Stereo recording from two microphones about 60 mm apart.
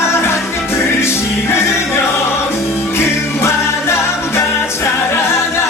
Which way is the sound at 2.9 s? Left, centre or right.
Left.